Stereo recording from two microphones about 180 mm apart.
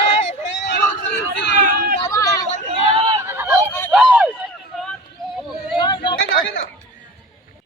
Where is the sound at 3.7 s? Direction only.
10° left (ahead or behind).